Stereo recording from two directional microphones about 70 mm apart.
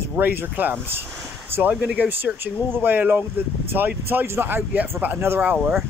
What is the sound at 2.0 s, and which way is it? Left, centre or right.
Speech, right.